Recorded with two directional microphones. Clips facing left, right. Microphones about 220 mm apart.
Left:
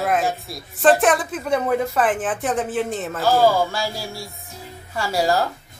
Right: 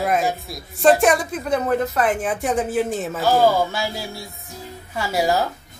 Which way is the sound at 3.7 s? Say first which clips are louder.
Even; 20° right (ahead or behind).